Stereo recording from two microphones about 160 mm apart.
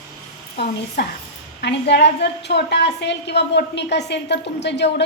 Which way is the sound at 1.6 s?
90° left.